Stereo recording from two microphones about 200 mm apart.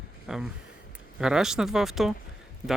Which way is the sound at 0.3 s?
Centre (ahead or behind).